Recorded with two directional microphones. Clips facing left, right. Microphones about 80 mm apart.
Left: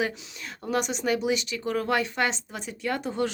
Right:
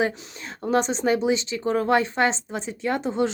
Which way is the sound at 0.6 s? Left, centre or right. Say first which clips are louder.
Right 5 dB; right.